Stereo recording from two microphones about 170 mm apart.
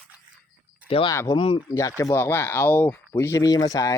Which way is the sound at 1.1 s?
15° left (ahead or behind).